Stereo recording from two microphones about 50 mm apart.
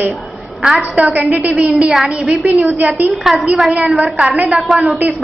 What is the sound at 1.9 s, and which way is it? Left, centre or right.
Speech, centre.